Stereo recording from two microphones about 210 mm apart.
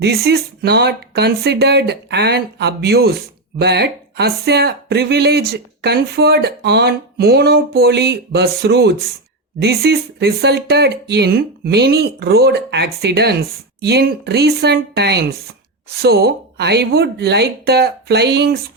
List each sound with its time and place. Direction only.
0.0 s speech: 50° right (ahead or behind)